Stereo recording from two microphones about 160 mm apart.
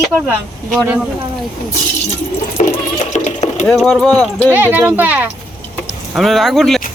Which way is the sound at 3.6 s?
5° left (ahead or behind).